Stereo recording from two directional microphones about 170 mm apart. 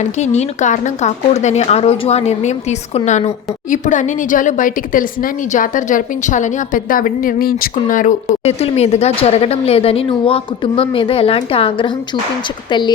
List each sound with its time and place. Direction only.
0.2 s a woman's voice: 45° left (ahead or behind)